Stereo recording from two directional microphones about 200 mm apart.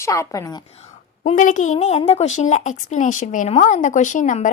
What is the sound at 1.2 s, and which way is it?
A woman's voice, 40° left (ahead or behind).